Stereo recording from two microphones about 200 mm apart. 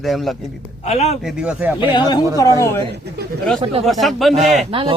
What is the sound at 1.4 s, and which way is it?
Speech, 5° right (ahead or behind).